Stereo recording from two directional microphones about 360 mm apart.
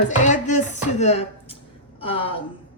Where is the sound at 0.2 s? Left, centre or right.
Centre.